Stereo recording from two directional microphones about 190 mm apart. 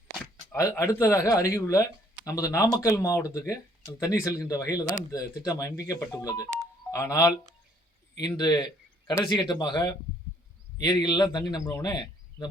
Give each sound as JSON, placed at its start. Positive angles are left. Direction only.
{"t": 0.5, "sound": "a man's voice", "side_deg": 15}